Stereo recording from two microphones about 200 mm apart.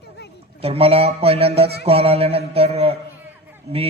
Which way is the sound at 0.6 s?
30° right (ahead or behind).